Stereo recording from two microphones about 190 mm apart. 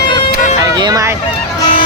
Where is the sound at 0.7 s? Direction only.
20° right (ahead or behind).